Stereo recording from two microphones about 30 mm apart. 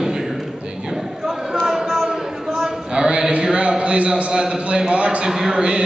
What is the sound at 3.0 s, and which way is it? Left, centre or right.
Music, right.